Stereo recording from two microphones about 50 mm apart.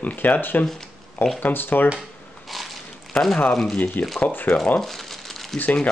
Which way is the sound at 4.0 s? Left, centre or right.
Left.